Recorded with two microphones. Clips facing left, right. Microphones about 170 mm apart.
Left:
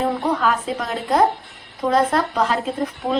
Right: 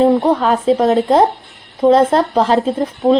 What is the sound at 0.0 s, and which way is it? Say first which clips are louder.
A woman's voice: right 8 dB; 25° right (ahead or behind).